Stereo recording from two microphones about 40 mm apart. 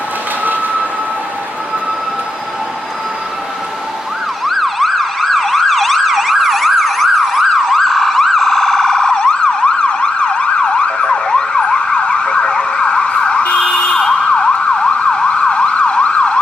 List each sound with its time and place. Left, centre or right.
4.5 s emergency vehicle: centre
9.1 s emergency vehicle: left